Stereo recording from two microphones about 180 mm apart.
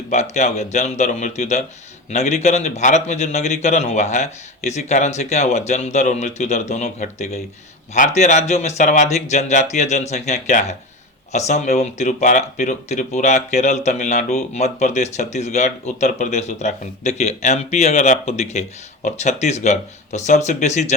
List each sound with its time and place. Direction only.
0.1 s speech: 40° left (ahead or behind)